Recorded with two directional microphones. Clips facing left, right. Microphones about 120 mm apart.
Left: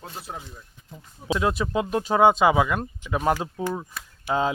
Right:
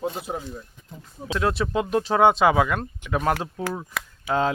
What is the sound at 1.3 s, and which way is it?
Speech, 10° left (ahead or behind).